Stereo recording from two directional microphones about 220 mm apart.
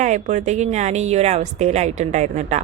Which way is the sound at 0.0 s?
30° right (ahead or behind).